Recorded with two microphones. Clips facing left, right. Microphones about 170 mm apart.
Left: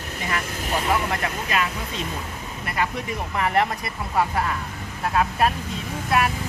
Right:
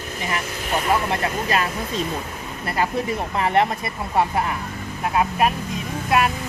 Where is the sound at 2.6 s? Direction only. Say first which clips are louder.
Right 4 dB; 30° right (ahead or behind).